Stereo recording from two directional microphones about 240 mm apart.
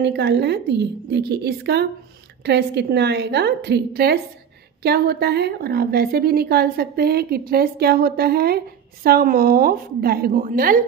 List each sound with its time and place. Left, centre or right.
0.0 s a woman's voice: right